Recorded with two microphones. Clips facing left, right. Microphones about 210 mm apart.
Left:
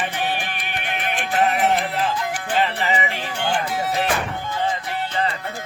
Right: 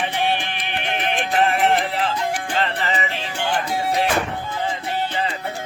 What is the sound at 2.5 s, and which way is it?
Music, 10° left (ahead or behind).